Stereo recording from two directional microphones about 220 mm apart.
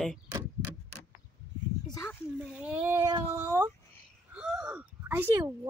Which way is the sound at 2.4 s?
5° right (ahead or behind).